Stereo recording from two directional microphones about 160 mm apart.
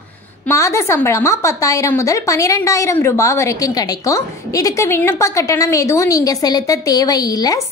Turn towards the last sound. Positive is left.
turn(degrees=25)  # may be behind; listen again after turning